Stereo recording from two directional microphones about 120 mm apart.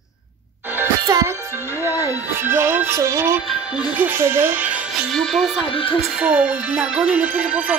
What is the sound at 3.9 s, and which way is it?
Music, 20° right (ahead or behind).